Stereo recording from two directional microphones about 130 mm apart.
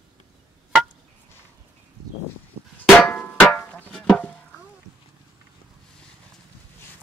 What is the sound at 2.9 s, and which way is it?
Music, 5° left (ahead or behind).